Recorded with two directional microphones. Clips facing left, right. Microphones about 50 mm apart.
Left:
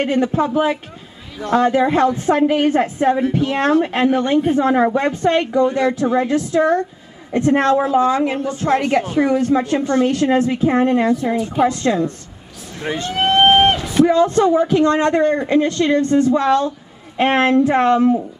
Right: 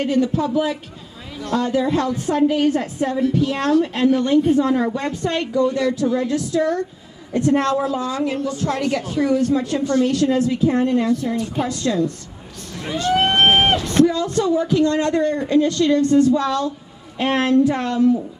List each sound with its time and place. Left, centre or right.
0.0 s a woman's voice: left
13.2 s vehicle: centre
14.0 s a woman's voice: left